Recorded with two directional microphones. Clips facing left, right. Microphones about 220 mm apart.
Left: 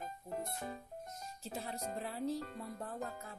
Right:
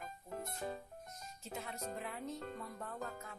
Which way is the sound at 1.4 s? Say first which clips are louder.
Left 2 dB; 35° left (ahead or behind).